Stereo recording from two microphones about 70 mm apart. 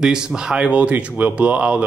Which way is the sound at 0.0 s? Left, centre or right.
Centre.